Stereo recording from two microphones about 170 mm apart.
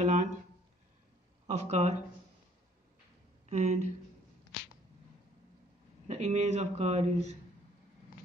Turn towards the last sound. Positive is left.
turn(degrees=-40)  # may be behind; listen again after turning